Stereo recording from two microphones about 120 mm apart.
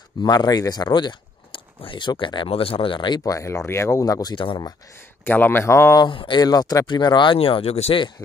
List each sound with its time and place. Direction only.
0.2 s speech: 35° left (ahead or behind)
5.2 s speech: 15° left (ahead or behind)
5.9 s speech: 40° left (ahead or behind); by 8.0 s 60° left (ahead or behind)